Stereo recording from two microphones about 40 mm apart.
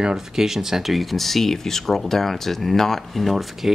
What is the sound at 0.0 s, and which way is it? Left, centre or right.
Speech, centre.